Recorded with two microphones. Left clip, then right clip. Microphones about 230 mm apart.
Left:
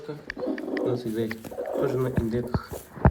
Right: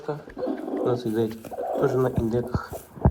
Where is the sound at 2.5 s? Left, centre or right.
Centre.